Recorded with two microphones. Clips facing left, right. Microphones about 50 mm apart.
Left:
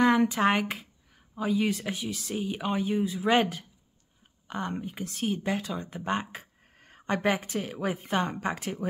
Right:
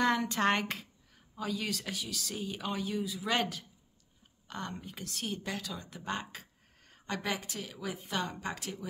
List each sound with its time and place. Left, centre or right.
0.3 s speech: centre
1.3 s speech: left